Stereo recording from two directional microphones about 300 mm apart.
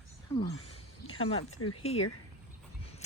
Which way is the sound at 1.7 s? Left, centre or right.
Centre.